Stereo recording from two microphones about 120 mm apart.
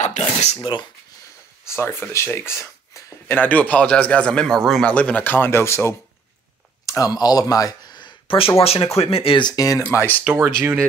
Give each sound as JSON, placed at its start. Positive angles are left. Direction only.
{"t": 0.0, "sound": "dishes", "side_deg": 70}
{"t": 0.6, "sound": "speech", "side_deg": 40}
{"t": 1.7, "sound": "speech", "side_deg": 20}
{"t": 9.8, "sound": "speech", "side_deg": 15}
{"t": 10.2, "sound": "speech", "side_deg": -15}